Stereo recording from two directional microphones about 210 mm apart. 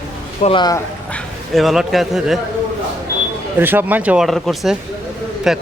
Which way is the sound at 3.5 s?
10° right (ahead or behind).